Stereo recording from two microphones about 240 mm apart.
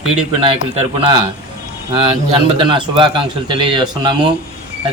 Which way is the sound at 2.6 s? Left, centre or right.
Right.